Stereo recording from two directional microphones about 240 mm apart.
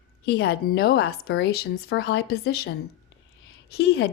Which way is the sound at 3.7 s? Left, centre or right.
Left.